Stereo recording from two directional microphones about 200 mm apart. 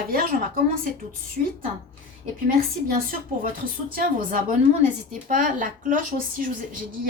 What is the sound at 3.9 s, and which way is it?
A woman's voice, 40° right (ahead or behind).